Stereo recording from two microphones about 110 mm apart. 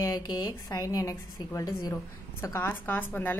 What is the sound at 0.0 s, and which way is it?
A woman's voice, 40° left (ahead or behind).